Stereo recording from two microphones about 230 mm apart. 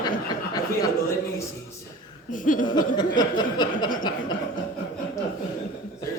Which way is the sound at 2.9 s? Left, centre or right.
Centre.